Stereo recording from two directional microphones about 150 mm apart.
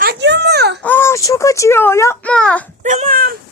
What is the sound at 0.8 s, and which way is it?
A woman's voice, 15° left (ahead or behind).